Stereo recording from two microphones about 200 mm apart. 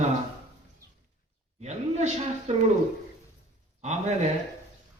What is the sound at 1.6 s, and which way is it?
Speech, 35° right (ahead or behind).